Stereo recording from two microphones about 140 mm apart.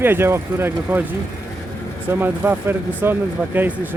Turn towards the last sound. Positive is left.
turn(degrees=-15)  # may be behind; listen again after turning